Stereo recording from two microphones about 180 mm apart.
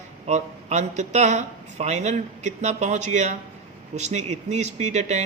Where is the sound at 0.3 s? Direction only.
40° right (ahead or behind).